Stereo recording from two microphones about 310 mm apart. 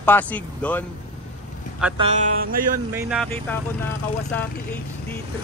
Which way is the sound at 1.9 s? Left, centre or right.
Centre.